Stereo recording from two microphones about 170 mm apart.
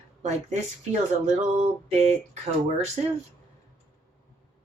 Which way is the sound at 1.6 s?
40° right (ahead or behind).